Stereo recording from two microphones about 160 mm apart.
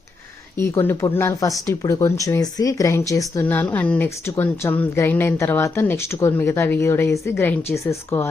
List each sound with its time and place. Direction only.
0.5 s speech: 15° left (ahead or behind)